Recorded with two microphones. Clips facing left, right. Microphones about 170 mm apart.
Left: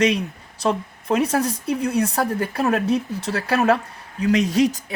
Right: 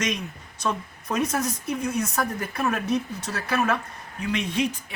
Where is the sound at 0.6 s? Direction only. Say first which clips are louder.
Left 6 dB; 30° left (ahead or behind).